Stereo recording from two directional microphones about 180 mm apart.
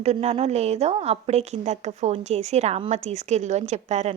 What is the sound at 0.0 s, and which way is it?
A woman's voice, 35° right (ahead or behind).